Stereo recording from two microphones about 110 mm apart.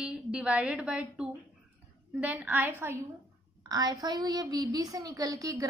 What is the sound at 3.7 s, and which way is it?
A woman's voice, 35° right (ahead or behind).